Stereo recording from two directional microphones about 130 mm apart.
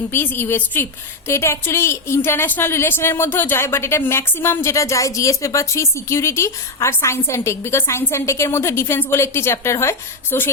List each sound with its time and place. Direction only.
0.1 s a woman's voice: 15° left (ahead or behind)